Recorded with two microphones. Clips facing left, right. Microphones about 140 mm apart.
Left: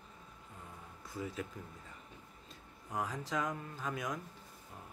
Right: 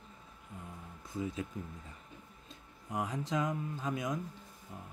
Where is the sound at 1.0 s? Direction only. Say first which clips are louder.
Right 3 dB; 20° right (ahead or behind).